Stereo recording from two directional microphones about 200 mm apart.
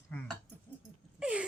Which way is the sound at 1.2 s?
5° right (ahead or behind).